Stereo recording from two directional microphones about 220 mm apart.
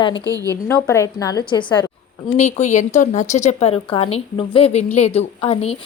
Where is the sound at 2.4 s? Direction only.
30° left (ahead or behind).